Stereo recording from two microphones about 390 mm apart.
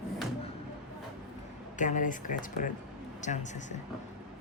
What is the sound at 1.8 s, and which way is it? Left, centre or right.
Speech, centre.